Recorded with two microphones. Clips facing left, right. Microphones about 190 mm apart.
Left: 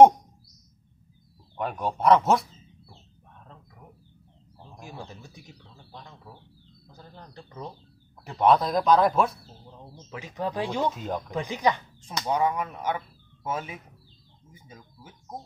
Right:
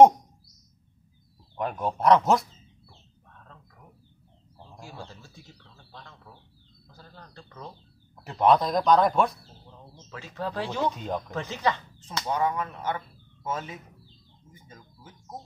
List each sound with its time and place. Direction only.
1.6 s speech: centre (ahead or behind)
4.7 s speech: 15° left (ahead or behind)
8.2 s speech: centre (ahead or behind)
10.0 s speech: 15° left (ahead or behind)
10.9 s speech: centre (ahead or behind)
11.2 s speech: 15° left (ahead or behind)